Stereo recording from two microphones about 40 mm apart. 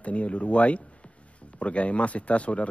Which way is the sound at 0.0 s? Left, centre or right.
Left.